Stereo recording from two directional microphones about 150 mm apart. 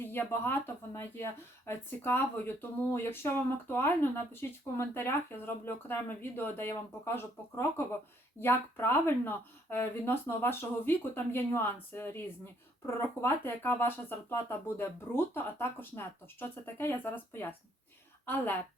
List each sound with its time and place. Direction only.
0.0 s speech: 15° left (ahead or behind)